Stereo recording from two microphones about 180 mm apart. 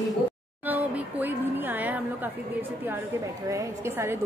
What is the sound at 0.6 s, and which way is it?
A woman's voice, 10° right (ahead or behind).